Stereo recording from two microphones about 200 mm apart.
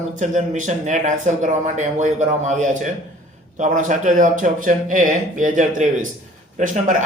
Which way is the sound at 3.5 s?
40° right (ahead or behind).